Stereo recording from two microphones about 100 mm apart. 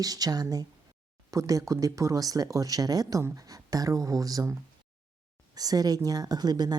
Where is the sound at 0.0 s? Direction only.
40° right (ahead or behind).